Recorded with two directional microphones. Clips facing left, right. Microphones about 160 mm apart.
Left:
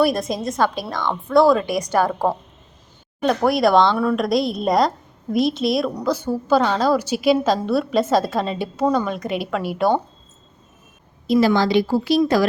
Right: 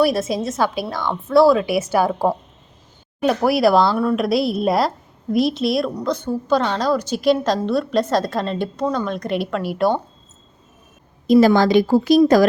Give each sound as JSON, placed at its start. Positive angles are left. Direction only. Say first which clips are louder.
{"t": 0.0, "sound": "a woman's voice", "louder": "right 1 dB", "side_deg": 0}
{"t": 11.3, "sound": "a woman's voice", "louder": "right 4 dB", "side_deg": -45}